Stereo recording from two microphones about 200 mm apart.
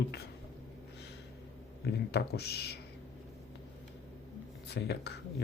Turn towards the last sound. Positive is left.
turn(degrees=55)  # may be behind; listen again after turning